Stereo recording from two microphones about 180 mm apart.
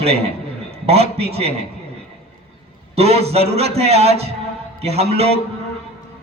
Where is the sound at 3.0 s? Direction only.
35° right (ahead or behind).